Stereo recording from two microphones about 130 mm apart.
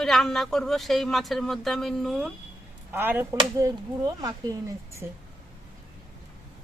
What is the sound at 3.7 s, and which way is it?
Speech, 30° right (ahead or behind).